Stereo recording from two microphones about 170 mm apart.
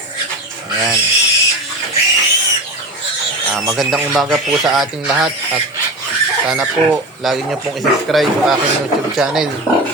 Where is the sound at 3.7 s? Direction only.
Centre (ahead or behind).